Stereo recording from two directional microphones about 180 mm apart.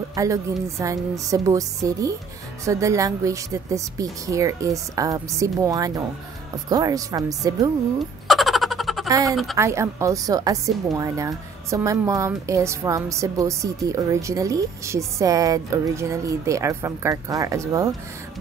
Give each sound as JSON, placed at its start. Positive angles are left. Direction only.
{"t": 0.1, "sound": "a woman's voice", "side_deg": -20}
{"t": 8.3, "sound": "a sound", "side_deg": 0}
{"t": 9.1, "sound": "a woman's voice", "side_deg": -20}